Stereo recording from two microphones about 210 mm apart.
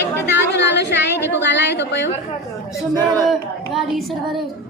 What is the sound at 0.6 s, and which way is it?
A woman's voice, 55° left (ahead or behind).